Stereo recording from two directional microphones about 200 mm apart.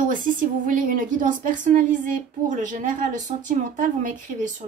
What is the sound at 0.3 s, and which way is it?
A woman's voice, 40° right (ahead or behind).